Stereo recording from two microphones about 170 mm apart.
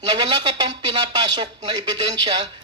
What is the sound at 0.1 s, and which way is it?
Speech, 25° right (ahead or behind).